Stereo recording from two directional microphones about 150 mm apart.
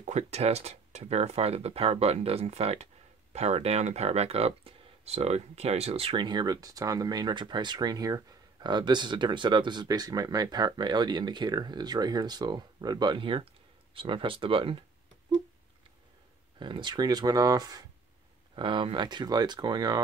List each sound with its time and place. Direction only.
0.0 s speech: 50° right (ahead or behind)
16.5 s speech: 35° right (ahead or behind)